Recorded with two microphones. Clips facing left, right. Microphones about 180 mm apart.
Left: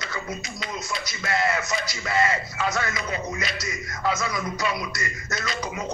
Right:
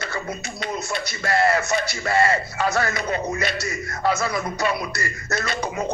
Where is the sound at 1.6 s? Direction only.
60° right (ahead or behind).